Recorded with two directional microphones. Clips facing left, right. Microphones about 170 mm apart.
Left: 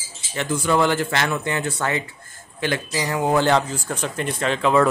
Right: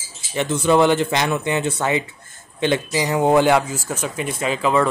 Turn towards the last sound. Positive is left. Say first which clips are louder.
# even
turn(degrees=0)  # may be behind; listen again after turning